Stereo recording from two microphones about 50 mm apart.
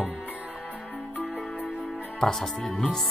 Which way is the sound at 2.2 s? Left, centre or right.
Centre.